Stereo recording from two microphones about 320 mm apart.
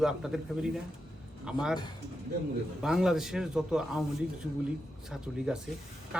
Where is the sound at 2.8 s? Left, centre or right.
Centre.